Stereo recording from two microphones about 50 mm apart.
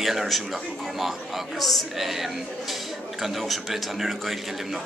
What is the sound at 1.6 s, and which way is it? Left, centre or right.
A man's voice, centre.